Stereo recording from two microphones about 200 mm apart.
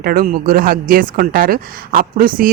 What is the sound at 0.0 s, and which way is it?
Speech, 45° right (ahead or behind).